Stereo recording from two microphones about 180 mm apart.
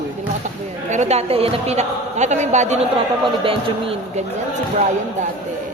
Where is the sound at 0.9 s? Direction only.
40° right (ahead or behind).